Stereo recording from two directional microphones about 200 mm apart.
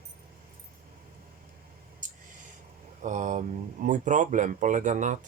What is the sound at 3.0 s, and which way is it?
Speech, 35° right (ahead or behind).